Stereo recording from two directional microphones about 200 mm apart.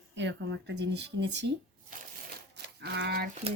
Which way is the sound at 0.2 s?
60° right (ahead or behind).